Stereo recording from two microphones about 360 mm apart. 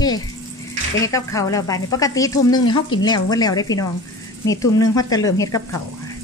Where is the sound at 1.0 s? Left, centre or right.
Centre.